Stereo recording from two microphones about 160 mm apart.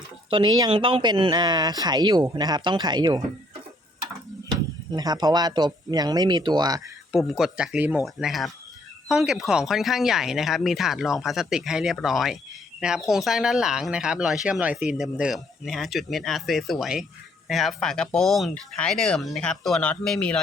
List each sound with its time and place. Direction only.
0.3 s speech: 30° right (ahead or behind)
4.9 s speech: 25° right (ahead or behind)
7.1 s speech: centre (ahead or behind)